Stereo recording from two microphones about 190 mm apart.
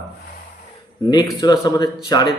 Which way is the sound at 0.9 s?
20° left (ahead or behind).